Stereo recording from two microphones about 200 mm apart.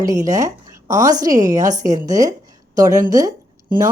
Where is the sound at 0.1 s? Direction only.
15° right (ahead or behind).